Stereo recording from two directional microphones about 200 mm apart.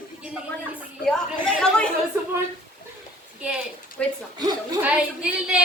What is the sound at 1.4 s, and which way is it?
Chatter, centre (ahead or behind).